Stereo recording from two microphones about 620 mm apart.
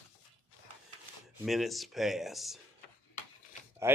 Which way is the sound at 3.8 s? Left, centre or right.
Centre.